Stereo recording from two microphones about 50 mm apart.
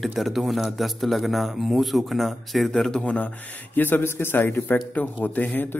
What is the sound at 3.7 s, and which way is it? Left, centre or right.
Speech, left.